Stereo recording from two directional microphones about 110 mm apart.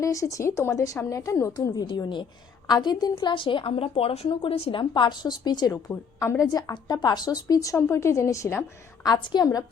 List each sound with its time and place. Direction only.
0.0 s a woman's voice: 30° left (ahead or behind)
5.9 s a woman's voice: 25° left (ahead or behind)
9.2 s a woman's voice: 40° left (ahead or behind)